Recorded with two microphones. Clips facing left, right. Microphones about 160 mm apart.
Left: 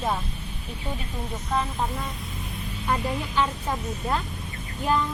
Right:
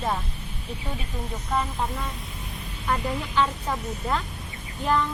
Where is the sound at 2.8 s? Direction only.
10° left (ahead or behind).